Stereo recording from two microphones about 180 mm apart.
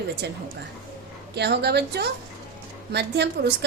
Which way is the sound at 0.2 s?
70° right (ahead or behind).